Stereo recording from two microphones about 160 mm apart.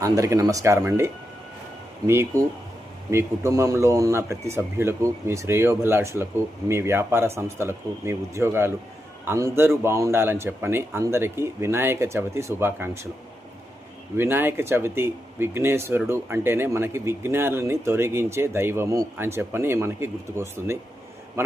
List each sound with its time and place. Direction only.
0.0 s speech: 20° right (ahead or behind)
14.2 s speech: 15° right (ahead or behind)